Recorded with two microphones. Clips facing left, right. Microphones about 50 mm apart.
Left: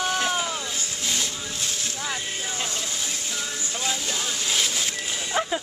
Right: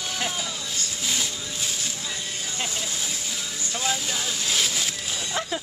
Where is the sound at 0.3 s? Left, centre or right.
Left.